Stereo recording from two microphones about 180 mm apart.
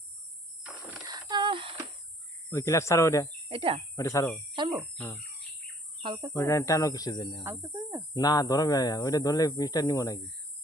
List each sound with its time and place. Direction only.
1.0 s a sound: 20° right (ahead or behind)
2.5 s speech: 15° left (ahead or behind)
3.5 s speech: 30° right (ahead or behind)
3.9 s speech: 20° left (ahead or behind)
4.5 s cricket: 25° right (ahead or behind)
4.9 s bird: 10° left (ahead or behind)
6.0 s speech: 25° right (ahead or behind)
6.3 s speech: 15° left (ahead or behind)
7.4 s speech: 15° right (ahead or behind)
8.1 s speech: 20° left (ahead or behind)